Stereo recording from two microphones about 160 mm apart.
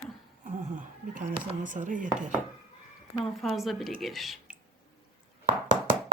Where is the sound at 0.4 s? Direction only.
50° right (ahead or behind).